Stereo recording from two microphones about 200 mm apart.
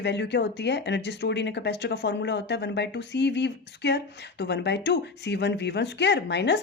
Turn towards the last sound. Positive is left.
turn(degrees=60)  # may be behind; listen again after turning